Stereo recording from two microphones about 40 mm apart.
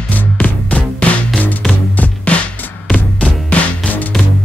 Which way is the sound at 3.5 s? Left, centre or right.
Left.